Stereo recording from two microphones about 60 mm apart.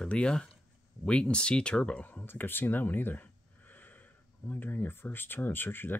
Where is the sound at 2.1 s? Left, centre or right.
Left.